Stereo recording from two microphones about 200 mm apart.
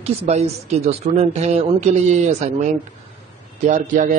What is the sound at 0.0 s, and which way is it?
Speech, 30° right (ahead or behind).